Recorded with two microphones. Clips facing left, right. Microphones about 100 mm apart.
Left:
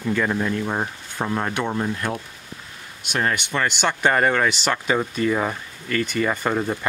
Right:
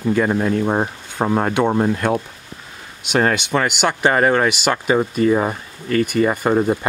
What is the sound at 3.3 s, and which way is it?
Speech, 15° right (ahead or behind).